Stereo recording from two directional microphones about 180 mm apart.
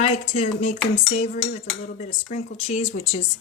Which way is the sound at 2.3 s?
40° left (ahead or behind).